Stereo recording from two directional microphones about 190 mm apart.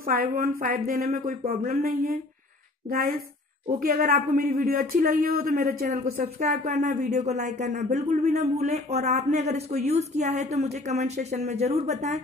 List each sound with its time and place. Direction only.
0.0 s speech: 50° right (ahead or behind)
3.8 s speech: 50° right (ahead or behind)
6.2 s speech: 35° right (ahead or behind)